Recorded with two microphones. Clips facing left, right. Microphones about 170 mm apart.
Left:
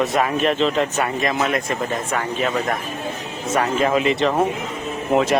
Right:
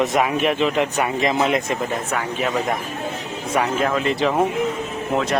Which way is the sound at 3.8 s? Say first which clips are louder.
Left 2 dB; 5° left (ahead or behind).